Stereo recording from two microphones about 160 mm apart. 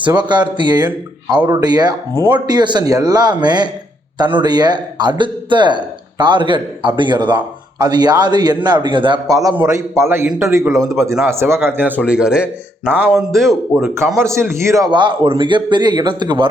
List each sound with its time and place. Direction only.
0.0 s a man's voice: 30° right (ahead or behind)
9.6 s speech: 15° right (ahead or behind)
13.9 s a man's voice: 15° right (ahead or behind)